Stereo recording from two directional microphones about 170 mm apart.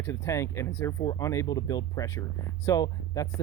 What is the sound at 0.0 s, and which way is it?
Speech, 15° left (ahead or behind).